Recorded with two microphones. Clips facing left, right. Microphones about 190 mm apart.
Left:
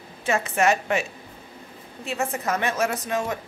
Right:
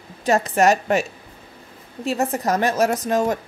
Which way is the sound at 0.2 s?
40° right (ahead or behind).